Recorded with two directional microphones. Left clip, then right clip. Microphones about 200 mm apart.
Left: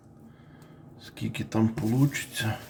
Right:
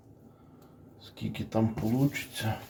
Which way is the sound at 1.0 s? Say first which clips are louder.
Left 4 dB; 20° left (ahead or behind).